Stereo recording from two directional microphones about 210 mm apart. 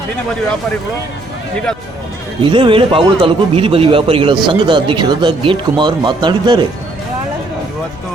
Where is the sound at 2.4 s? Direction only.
25° right (ahead or behind).